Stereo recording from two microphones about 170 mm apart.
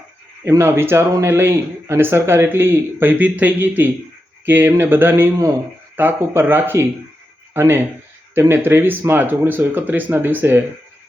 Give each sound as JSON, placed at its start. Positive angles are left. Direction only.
{"t": 0.4, "sound": "speech", "side_deg": -15}